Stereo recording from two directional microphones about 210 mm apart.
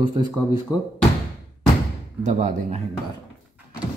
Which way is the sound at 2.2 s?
35° right (ahead or behind).